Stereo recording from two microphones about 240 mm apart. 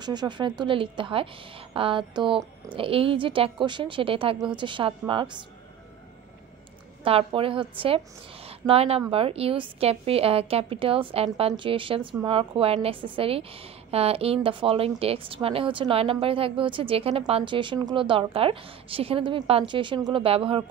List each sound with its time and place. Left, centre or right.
0.0 s a woman's voice: centre
7.0 s a woman's voice: right